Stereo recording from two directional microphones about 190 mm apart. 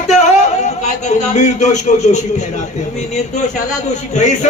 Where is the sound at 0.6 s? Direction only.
35° left (ahead or behind).